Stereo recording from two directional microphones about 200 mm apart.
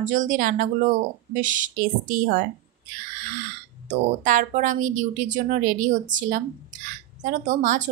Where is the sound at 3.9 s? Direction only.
40° right (ahead or behind).